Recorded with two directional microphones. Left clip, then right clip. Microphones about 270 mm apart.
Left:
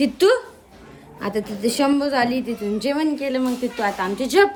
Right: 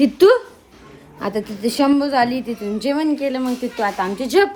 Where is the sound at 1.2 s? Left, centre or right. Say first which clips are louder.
Right 1 dB; centre.